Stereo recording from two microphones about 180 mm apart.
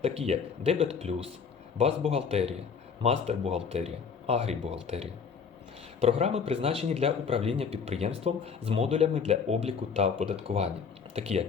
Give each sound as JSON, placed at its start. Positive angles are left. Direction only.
{"t": 0.0, "sound": "speech", "side_deg": -35}